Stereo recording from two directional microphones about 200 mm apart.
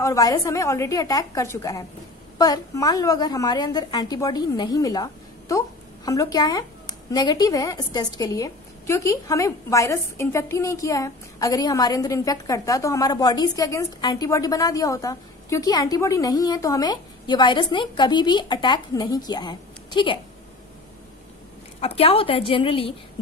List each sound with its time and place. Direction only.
0.0 s a woman's voice: 15° left (ahead or behind)
21.7 s a woman's voice: 30° left (ahead or behind)